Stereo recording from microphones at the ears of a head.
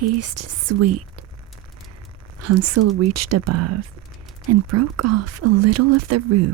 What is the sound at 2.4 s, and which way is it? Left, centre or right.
Speech, right.